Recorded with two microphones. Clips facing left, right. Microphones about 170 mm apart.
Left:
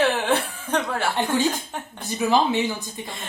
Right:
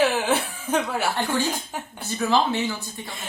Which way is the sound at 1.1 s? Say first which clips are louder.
Left 2 dB; 20° left (ahead or behind).